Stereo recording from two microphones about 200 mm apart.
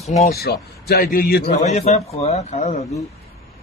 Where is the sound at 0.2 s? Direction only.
50° left (ahead or behind).